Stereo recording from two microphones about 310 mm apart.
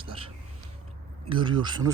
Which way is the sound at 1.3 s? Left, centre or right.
Centre.